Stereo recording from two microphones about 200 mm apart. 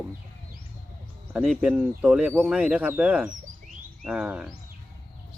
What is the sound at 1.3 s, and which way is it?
Speech, 5° right (ahead or behind).